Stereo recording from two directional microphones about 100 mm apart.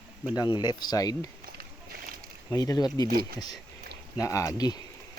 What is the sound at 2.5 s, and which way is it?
Speech, 40° left (ahead or behind).